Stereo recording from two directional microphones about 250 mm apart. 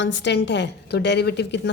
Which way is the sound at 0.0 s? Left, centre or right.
Left.